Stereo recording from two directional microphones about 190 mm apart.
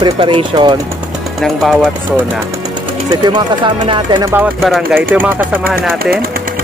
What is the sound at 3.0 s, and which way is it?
Speech, 20° right (ahead or behind).